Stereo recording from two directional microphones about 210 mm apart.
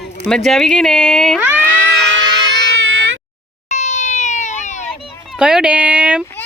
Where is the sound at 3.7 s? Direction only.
35° left (ahead or behind).